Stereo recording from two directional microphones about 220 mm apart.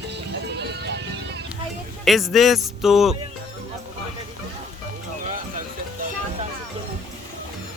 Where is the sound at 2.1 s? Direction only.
Centre (ahead or behind).